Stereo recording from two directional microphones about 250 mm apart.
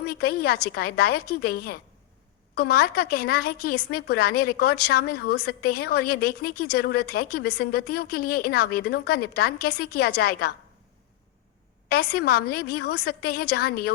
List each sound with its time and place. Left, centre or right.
0.0 s a woman's voice: left
12.1 s a woman's voice: left